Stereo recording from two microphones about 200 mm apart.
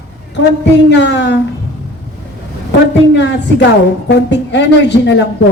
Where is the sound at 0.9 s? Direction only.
60° left (ahead or behind).